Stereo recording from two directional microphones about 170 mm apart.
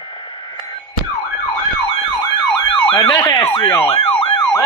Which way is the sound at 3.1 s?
20° left (ahead or behind).